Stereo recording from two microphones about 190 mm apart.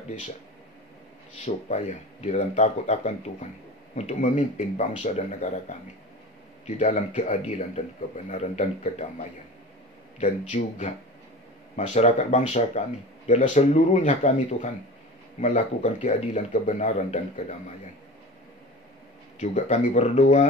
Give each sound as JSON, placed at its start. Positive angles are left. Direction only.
{"t": 1.4, "sound": "speech", "side_deg": 40}
{"t": 19.4, "sound": "speech", "side_deg": 40}